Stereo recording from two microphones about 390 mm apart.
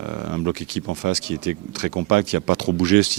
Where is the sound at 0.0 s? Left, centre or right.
Right.